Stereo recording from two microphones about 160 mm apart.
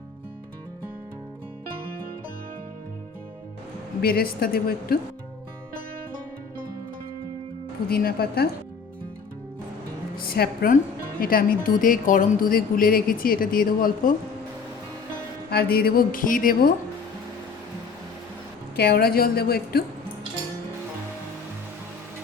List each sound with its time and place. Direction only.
4.0 s a woman's voice: 70° left (ahead or behind)
7.9 s a woman's voice: 70° left (ahead or behind)
10.2 s a woman's voice: 75° left (ahead or behind)
15.4 s a woman's voice: 75° left (ahead or behind)
18.8 s a woman's voice: 75° left (ahead or behind)